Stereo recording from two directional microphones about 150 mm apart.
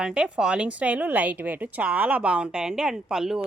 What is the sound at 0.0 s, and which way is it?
A woman's voice, 5° right (ahead or behind).